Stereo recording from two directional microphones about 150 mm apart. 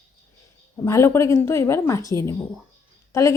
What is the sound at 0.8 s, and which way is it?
A woman's voice, 20° left (ahead or behind).